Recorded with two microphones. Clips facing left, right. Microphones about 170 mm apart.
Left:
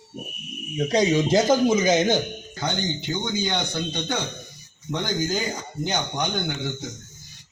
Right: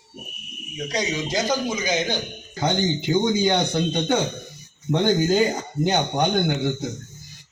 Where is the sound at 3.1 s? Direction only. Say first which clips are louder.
Right 7 dB; 30° right (ahead or behind).